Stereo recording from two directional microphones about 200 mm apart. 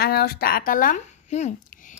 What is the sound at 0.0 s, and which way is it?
A woman's voice, 50° left (ahead or behind).